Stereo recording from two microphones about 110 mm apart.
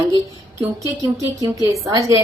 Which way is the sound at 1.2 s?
30° right (ahead or behind).